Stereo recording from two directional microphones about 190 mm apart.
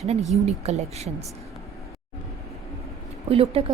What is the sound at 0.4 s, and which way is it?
Speech, 35° right (ahead or behind).